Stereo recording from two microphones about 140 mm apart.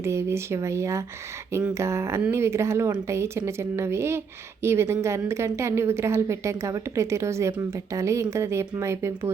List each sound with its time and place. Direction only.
0.0 s a woman's voice: 20° right (ahead or behind)